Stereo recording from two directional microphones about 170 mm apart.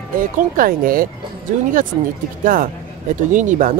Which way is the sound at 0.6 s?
55° right (ahead or behind).